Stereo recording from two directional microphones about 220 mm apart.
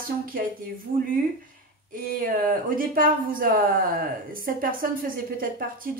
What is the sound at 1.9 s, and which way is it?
Speech, 40° right (ahead or behind).